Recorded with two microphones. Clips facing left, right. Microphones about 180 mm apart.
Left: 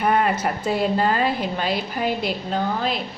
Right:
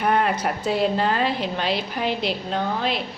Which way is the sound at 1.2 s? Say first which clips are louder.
Left 1 dB; 50° left (ahead or behind).